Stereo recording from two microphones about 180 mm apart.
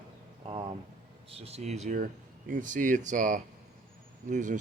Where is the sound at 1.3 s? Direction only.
35° right (ahead or behind).